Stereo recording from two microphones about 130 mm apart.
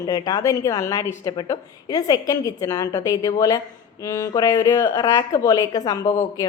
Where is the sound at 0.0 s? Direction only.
30° left (ahead or behind).